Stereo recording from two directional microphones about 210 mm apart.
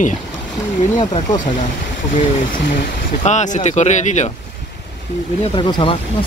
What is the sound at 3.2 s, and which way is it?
Speech, 35° left (ahead or behind).